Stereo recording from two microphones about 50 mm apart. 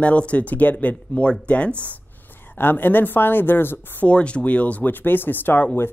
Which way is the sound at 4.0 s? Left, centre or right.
Left.